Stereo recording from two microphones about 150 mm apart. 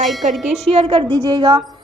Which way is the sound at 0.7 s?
40° right (ahead or behind).